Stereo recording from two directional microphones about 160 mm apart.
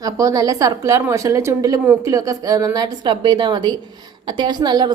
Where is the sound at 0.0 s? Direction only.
20° right (ahead or behind).